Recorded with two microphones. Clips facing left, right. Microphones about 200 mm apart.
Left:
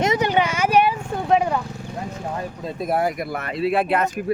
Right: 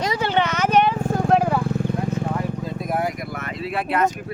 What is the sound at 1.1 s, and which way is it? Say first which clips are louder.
Vehicle: right 1 dB; centre (ahead or behind).